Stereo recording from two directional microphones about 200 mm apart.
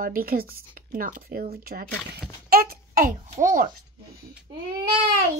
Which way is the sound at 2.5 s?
50° right (ahead or behind).